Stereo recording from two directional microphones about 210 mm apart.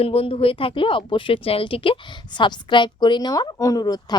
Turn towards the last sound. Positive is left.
turn(degrees=20)  # may be behind; listen again after turning